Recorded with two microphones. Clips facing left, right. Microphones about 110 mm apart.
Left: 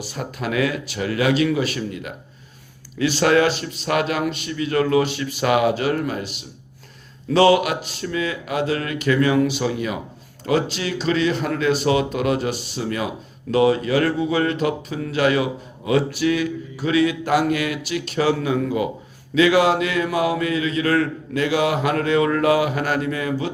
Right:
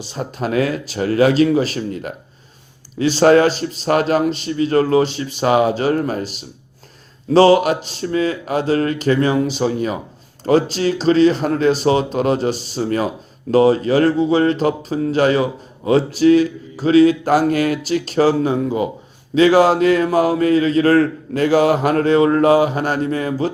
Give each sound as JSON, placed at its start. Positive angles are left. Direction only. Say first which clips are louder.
{"t": 0.0, "sound": "a man's voice", "louder": "right 4 dB", "side_deg": -30}